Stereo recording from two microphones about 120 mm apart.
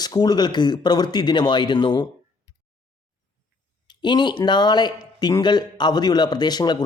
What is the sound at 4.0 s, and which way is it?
Speech, 40° left (ahead or behind).